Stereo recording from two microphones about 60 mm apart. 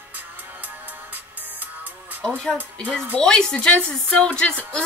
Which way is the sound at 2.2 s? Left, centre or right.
Centre.